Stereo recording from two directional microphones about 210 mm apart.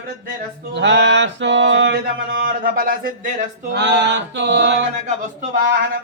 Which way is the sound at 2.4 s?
40° right (ahead or behind).